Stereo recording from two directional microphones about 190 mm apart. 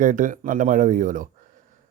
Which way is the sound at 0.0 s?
45° right (ahead or behind).